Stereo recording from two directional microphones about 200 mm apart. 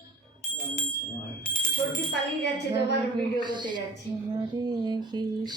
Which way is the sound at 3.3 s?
20° right (ahead or behind).